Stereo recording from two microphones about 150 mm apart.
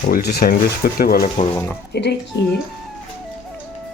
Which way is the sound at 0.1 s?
90° left.